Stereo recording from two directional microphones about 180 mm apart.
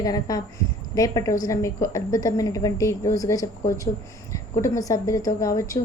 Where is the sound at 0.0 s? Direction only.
20° left (ahead or behind).